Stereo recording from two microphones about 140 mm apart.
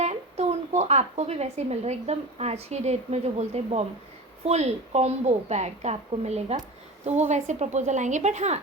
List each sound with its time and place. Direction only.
0.0 s a woman's voice: 50° right (ahead or behind)